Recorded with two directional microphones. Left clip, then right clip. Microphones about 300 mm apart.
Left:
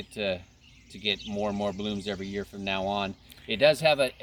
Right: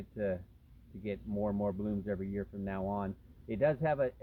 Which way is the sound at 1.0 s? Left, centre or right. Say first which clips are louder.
Left 8 dB; centre.